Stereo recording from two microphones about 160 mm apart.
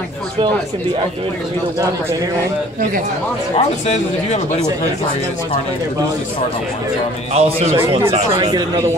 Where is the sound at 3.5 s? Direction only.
45° left (ahead or behind).